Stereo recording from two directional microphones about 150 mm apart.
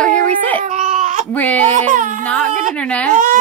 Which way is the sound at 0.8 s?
55° right (ahead or behind).